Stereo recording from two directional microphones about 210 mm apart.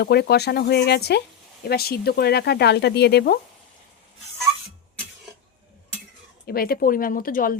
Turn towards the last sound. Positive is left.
turn(degrees=40)  # may be behind; listen again after turning